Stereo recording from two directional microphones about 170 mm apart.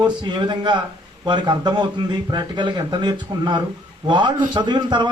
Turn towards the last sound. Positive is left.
turn(degrees=-25)  # may be behind; listen again after turning